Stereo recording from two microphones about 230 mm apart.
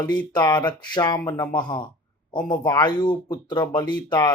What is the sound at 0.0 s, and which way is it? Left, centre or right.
Speech, centre.